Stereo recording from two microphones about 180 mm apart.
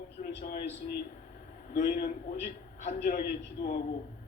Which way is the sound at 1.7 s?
55° left (ahead or behind).